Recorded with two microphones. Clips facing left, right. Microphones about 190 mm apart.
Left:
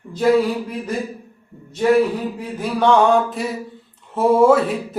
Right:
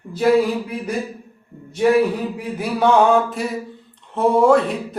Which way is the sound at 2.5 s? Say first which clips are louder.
Even; 5° right (ahead or behind).